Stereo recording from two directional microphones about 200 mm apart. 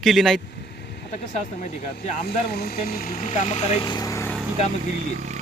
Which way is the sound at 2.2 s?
50° left (ahead or behind).